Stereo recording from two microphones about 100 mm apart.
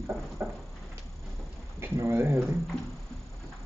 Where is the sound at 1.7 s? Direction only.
25° right (ahead or behind).